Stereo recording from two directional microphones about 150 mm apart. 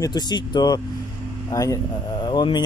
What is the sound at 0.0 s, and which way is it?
Speech, 30° left (ahead or behind).